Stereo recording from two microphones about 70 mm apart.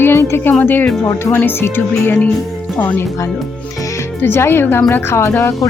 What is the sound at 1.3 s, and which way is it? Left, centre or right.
Speech, left.